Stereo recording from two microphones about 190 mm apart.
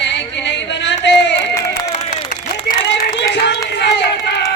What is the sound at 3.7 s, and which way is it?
Speech, 65° left (ahead or behind).